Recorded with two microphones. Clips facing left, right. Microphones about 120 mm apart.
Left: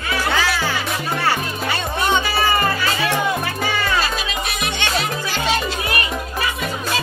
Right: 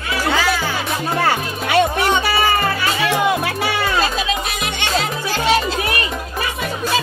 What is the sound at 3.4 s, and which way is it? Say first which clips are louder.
Music: right 2 dB; 80° right.